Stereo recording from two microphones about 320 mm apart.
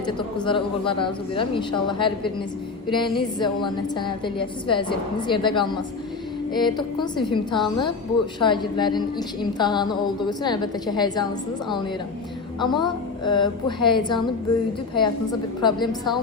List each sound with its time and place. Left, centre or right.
0.4 s a woman's voice: centre
12.5 s a woman's voice: centre